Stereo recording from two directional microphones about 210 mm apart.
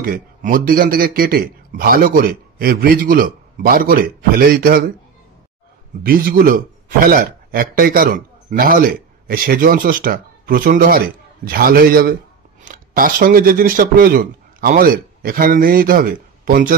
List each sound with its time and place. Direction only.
0.0 s a man's voice: 40° right (ahead or behind)
6.0 s a man's voice: 45° right (ahead or behind)